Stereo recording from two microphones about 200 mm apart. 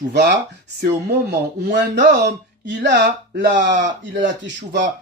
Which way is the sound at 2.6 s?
60° right (ahead or behind).